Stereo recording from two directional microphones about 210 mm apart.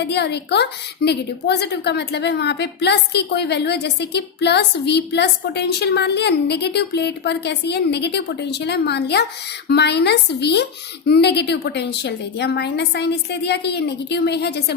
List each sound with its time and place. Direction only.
0.0 s a woman's voice: 55° left (ahead or behind)